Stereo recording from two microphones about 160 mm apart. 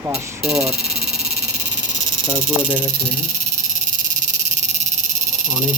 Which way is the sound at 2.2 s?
15° left (ahead or behind).